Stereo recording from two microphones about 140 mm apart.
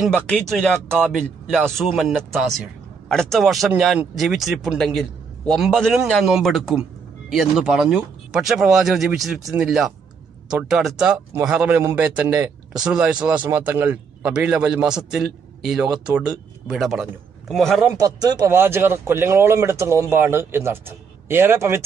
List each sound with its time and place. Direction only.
0.1 s a man's voice: 5° left (ahead or behind)
17.9 s speech: 25° right (ahead or behind)